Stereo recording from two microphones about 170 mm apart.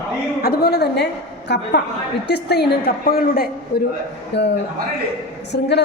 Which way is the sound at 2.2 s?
75° left (ahead or behind).